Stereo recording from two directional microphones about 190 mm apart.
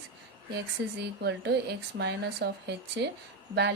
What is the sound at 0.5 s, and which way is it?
Speech, 60° right (ahead or behind).